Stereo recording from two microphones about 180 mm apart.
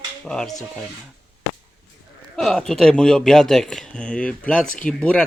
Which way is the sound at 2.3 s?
Centre (ahead or behind).